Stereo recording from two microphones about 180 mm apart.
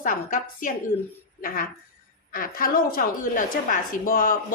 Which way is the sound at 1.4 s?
50° left (ahead or behind).